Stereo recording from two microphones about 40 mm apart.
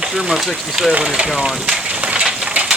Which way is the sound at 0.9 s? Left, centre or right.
Right.